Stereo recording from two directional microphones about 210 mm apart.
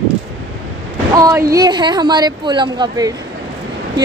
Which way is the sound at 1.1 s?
15° right (ahead or behind).